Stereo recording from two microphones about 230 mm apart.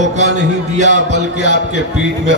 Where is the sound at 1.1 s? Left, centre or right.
Left.